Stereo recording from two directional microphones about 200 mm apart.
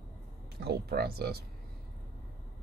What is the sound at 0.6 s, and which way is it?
Speech, 50° right (ahead or behind).